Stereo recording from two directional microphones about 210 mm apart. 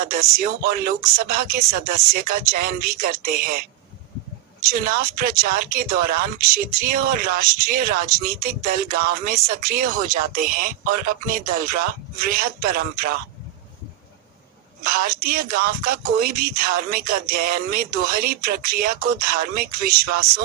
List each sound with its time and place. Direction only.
0.3 s speech: 45° right (ahead or behind)
4.6 s speech: 45° right (ahead or behind)
14.8 s speech: 45° right (ahead or behind)